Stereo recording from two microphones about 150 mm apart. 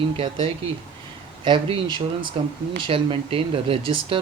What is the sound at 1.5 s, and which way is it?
Speech, 35° right (ahead or behind).